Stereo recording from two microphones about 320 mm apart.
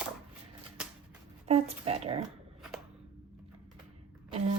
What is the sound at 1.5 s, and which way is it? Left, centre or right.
Speech, centre.